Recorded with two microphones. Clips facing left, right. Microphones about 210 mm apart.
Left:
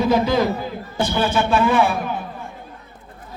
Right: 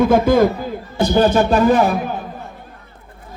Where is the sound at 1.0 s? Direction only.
40° right (ahead or behind).